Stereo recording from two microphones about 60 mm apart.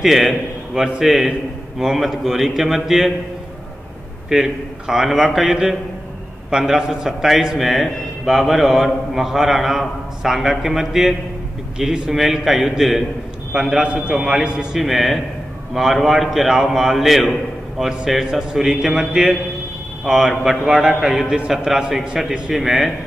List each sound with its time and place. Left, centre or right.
0.0 s a man's voice: centre
4.3 s a man's voice: centre
14.8 s a man's voice: centre